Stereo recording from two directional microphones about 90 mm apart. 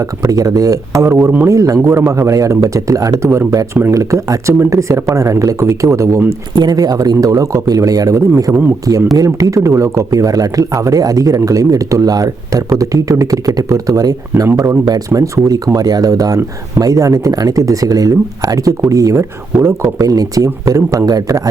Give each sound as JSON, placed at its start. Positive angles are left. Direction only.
{"t": 0.2, "sound": "speech", "side_deg": -40}
{"t": 6.6, "sound": "speech", "side_deg": -45}